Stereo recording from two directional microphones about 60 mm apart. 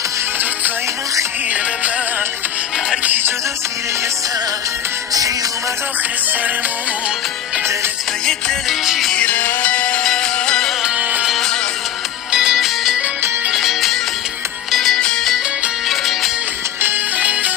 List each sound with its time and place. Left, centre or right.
8.8 s music: centre
9.2 s music: left; by 11.5 s centre
12.3 s music: centre
17.2 s music: right